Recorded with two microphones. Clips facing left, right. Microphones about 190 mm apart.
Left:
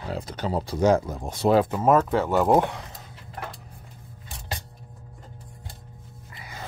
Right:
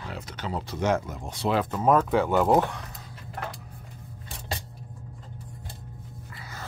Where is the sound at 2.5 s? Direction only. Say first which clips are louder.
Left 2 dB; 25° left (ahead or behind).